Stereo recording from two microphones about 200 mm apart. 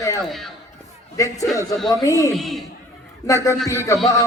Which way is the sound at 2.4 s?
Centre (ahead or behind).